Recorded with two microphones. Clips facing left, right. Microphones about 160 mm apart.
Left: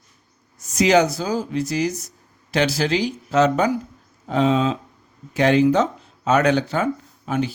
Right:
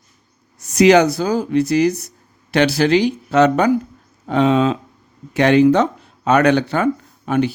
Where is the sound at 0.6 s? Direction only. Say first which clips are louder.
Right 5 dB; 70° right (ahead or behind).